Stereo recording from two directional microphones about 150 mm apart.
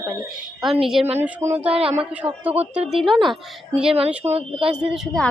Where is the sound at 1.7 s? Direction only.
40° right (ahead or behind).